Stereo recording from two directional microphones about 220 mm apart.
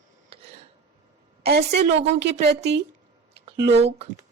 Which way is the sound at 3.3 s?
50° right (ahead or behind).